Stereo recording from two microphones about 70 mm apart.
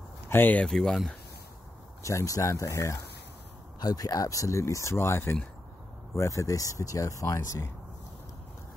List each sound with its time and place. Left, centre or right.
0.3 s speech: left
0.7 s speech: centre
2.0 s speech: left
3.8 s speech: left
6.1 s speech: left